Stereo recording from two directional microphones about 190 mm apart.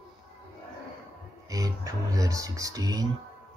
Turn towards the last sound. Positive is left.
turn(degrees=-20)  # may be behind; listen again after turning